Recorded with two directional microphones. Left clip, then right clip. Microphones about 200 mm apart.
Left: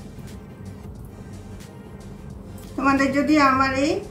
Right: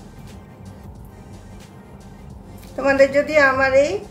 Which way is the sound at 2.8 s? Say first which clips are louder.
Right 4 dB; 35° right (ahead or behind).